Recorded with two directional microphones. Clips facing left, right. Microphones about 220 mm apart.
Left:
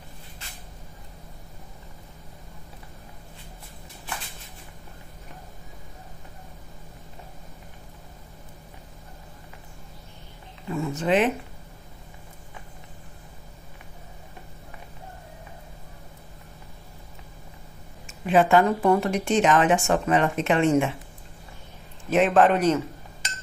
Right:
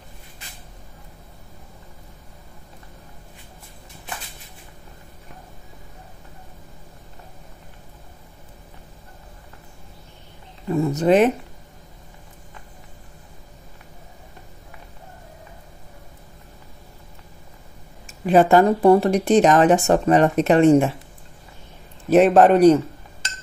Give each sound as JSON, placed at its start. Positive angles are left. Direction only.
{"t": 10.7, "sound": "speech", "side_deg": -40}
{"t": 18.0, "sound": "speech", "side_deg": -40}
{"t": 22.1, "sound": "speech", "side_deg": -40}